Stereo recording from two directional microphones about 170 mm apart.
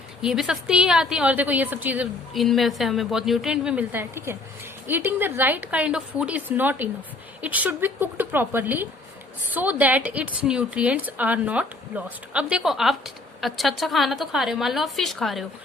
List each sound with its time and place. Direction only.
0.2 s a woman's voice: 5° right (ahead or behind)